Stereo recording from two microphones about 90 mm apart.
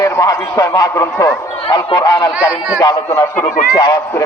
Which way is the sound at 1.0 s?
35° left (ahead or behind).